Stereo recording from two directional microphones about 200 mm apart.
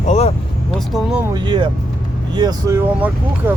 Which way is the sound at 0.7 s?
Centre (ahead or behind).